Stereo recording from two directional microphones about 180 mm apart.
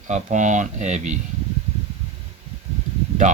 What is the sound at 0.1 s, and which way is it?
Speech, 40° right (ahead or behind).